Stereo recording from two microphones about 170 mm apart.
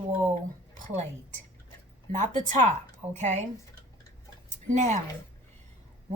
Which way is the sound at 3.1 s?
45° right (ahead or behind).